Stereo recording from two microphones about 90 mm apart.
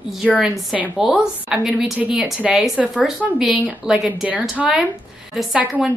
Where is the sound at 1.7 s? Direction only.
15° right (ahead or behind).